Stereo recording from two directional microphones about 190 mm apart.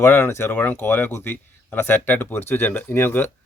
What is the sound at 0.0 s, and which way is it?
Speech, 15° left (ahead or behind).